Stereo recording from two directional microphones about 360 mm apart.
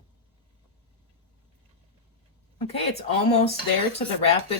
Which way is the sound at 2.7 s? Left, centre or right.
Centre.